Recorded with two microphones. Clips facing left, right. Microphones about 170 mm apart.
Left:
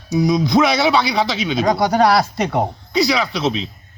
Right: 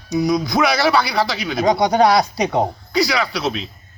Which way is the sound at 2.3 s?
15° right (ahead or behind).